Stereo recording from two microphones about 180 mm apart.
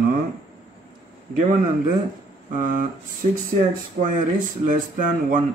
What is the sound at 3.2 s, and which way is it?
Speech, 40° right (ahead or behind).